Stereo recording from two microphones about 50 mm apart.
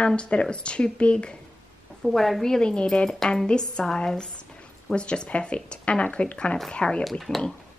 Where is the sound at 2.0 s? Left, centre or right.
Centre.